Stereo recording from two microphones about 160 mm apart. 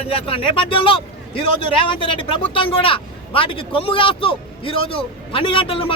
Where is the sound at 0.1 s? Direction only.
35° left (ahead or behind).